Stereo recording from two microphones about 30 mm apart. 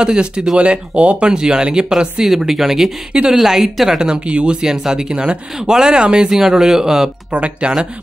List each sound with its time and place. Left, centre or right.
0.0 s speech: right
0.6 s speech: right
1.3 s speech: right
2.3 s speech: centre
3.1 s speech: right
3.4 s speech: centre
4.0 s speech: right
4.6 s speech: centre
5.1 s speech: right
6.3 s speech: centre
7.3 s speech: right